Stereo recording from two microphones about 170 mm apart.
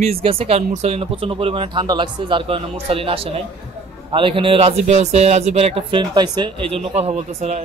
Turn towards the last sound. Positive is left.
turn(degrees=-40)  # may be behind; listen again after turning